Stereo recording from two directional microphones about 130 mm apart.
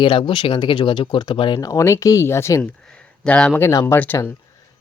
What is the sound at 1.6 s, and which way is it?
Speech, 25° left (ahead or behind).